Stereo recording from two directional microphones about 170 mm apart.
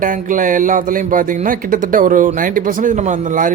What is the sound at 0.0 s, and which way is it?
Speech, 50° right (ahead or behind).